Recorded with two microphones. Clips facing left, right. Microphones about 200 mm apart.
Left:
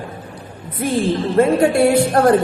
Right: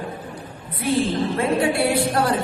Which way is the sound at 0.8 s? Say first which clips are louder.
Left 3 dB; 50° left (ahead or behind).